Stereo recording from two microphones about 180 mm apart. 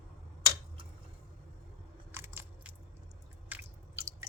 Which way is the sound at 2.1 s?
15° right (ahead or behind).